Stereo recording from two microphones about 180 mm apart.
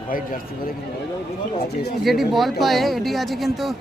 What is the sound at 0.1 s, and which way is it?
Speech, 50° left (ahead or behind).